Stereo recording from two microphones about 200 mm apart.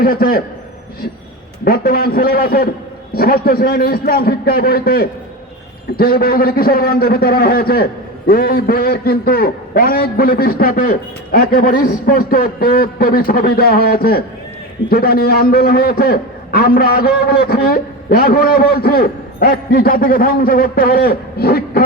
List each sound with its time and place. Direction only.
0.0 s a man's voice: 50° left (ahead or behind)
1.6 s a man's voice: 50° left (ahead or behind)